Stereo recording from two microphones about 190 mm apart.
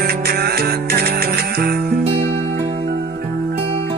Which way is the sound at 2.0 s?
30° right (ahead or behind).